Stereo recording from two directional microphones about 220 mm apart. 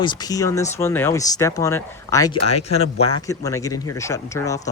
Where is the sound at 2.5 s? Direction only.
30° left (ahead or behind).